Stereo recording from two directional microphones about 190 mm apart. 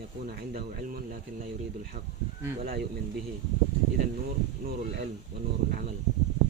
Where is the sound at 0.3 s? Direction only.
50° right (ahead or behind).